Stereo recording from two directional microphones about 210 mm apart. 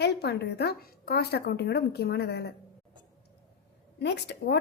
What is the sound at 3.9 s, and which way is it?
Speech, 55° left (ahead or behind).